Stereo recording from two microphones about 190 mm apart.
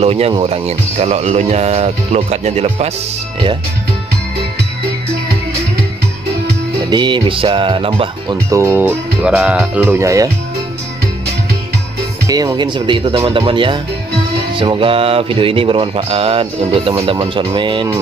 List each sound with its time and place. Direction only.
0.0 s a man's voice: 30° right (ahead or behind)
6.8 s music: 25° right (ahead or behind)
8.5 s speech: 15° right (ahead or behind)
12.3 s music: 20° right (ahead or behind)